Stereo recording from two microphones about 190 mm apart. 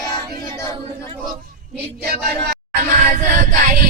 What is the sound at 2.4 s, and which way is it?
Music, 45° right (ahead or behind).